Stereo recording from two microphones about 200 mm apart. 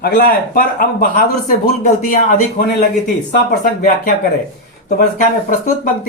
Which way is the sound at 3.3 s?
45° left (ahead or behind).